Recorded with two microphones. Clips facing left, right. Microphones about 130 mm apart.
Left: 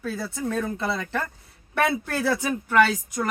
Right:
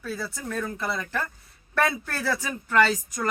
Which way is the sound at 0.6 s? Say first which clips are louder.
Even; 25° left (ahead or behind).